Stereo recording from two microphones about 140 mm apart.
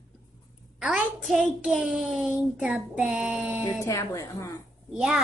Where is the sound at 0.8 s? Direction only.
5° right (ahead or behind).